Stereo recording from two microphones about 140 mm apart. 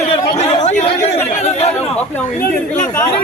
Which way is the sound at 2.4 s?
90° left.